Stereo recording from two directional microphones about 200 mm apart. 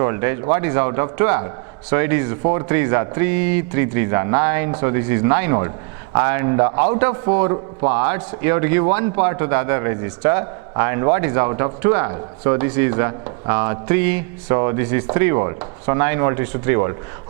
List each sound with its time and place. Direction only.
0.0 s a man's voice: 15° right (ahead or behind)